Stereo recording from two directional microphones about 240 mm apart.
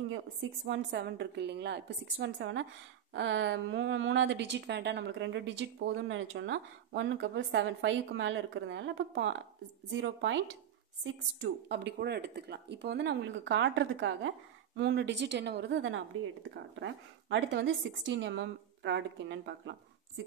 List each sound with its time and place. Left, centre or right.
0.1 s speech: right